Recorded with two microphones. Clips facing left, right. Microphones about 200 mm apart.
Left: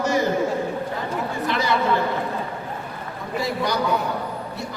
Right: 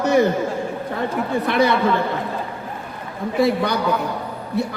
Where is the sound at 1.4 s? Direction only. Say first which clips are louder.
Right 5 dB; 60° right (ahead or behind).